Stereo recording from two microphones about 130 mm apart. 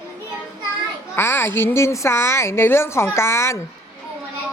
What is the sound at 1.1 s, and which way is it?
Speech, 20° left (ahead or behind).